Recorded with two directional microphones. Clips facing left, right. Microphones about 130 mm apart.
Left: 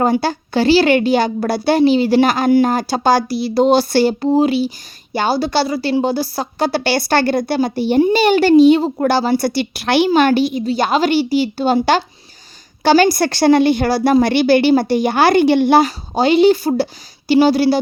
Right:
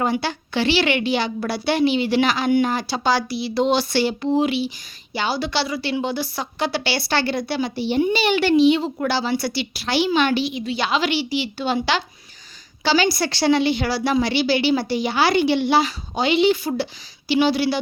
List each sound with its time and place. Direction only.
0.0 s a woman's voice: 40° left (ahead or behind)
10.1 s a woman's voice: 45° left (ahead or behind)